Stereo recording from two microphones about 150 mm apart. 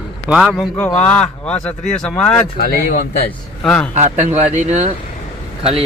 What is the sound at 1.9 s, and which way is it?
Speech, 10° left (ahead or behind).